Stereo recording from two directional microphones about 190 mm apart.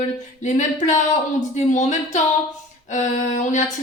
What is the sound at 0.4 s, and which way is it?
A woman's voice, 40° left (ahead or behind).